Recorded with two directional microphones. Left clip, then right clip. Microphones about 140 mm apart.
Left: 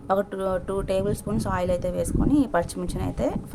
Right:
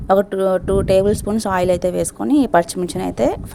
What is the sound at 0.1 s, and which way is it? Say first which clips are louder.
A woman's voice: right 9 dB; 45° right (ahead or behind).